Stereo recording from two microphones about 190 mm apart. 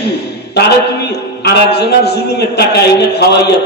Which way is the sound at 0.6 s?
60° left (ahead or behind).